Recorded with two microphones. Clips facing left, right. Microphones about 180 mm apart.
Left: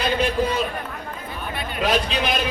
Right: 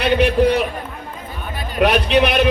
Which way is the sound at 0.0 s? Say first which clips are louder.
Right 7 dB; 70° right (ahead or behind).